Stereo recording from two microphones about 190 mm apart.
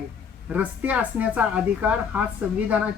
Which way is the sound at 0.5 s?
10° right (ahead or behind).